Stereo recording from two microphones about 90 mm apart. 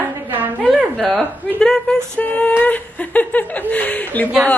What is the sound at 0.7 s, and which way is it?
A woman's voice, centre (ahead or behind).